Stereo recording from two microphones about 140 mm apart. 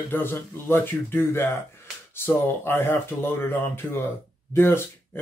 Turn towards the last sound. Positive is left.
turn(degrees=15)  # may be behind; listen again after turning